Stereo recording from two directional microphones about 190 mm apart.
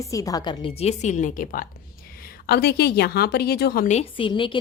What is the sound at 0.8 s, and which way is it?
Speech, 35° left (ahead or behind).